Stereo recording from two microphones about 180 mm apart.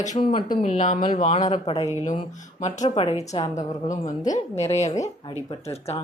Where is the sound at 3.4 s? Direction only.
40° left (ahead or behind).